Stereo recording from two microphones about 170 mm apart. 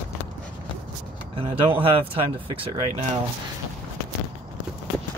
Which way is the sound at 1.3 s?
30° right (ahead or behind).